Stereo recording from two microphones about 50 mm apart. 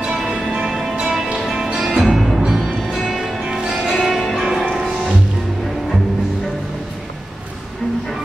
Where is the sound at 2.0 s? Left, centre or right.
Centre.